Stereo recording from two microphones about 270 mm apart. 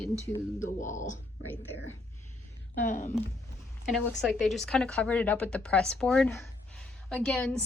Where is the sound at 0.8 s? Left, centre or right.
Left.